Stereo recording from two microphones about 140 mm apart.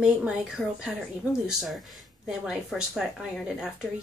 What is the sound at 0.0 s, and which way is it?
Speech, 5° right (ahead or behind).